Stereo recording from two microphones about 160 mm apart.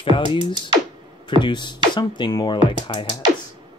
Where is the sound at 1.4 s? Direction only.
30° left (ahead or behind).